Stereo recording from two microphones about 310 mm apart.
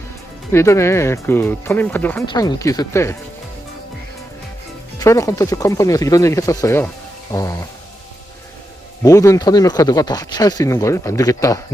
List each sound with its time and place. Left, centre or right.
0.5 s speech: centre
4.9 s speech: centre
9.0 s speech: centre